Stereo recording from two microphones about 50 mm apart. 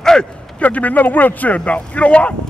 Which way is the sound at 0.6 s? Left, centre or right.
Left.